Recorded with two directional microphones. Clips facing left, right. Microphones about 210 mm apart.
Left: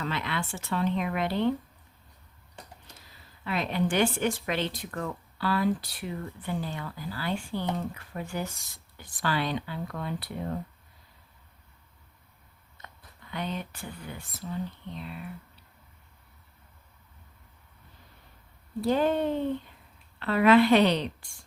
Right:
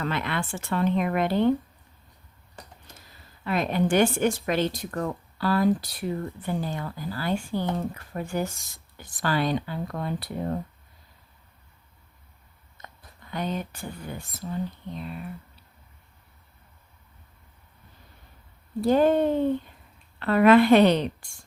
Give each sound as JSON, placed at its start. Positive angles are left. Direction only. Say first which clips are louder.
{"t": 0.0, "sound": "speech", "louder": "right 3 dB", "side_deg": -55}
{"t": 2.9, "sound": "a sound", "louder": "right 2 dB", "side_deg": -50}
{"t": 3.4, "sound": "speech", "louder": "right 4 dB", "side_deg": -45}
{"t": 13.3, "sound": "speech", "louder": "right 4 dB", "side_deg": -45}
{"t": 14.9, "sound": "speech", "louder": "right 4 dB", "side_deg": -45}
{"t": 18.9, "sound": "speech", "louder": "right 5 dB", "side_deg": -45}